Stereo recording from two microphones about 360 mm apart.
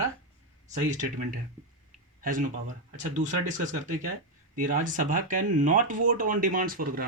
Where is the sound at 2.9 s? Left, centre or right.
Centre.